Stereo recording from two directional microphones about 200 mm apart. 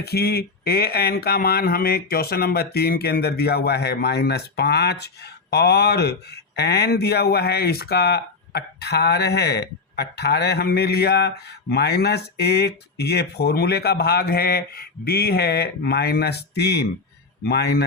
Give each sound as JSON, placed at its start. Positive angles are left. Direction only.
{"t": 0.0, "sound": "speech", "side_deg": 55}